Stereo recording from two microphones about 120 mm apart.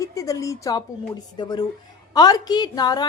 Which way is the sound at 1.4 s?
40° left (ahead or behind).